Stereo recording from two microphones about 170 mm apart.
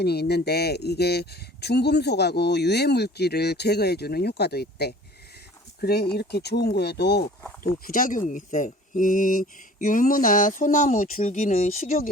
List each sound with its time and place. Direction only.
0.0 s speech: 70° left (ahead or behind)
7.6 s speech: 55° left (ahead or behind)